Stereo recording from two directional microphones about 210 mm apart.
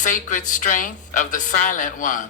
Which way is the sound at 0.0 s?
40° left (ahead or behind).